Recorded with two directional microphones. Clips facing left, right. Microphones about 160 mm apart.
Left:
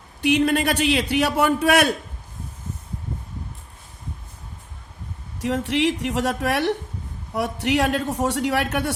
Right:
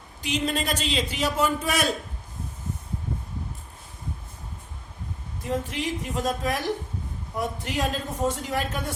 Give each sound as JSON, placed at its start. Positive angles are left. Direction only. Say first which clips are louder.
{"t": 0.2, "sound": "a man's voice", "louder": "left 8 dB", "side_deg": 65}
{"t": 5.4, "sound": "a man's voice", "louder": "left 7 dB", "side_deg": 75}